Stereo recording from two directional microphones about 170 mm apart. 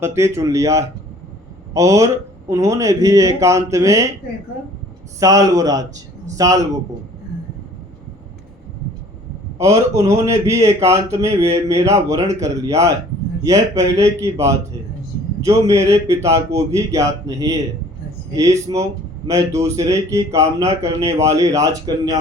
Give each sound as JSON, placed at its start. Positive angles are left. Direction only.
{"t": 0.0, "sound": "speech", "side_deg": -15}
{"t": 5.2, "sound": "speech", "side_deg": -20}
{"t": 9.6, "sound": "speech", "side_deg": -20}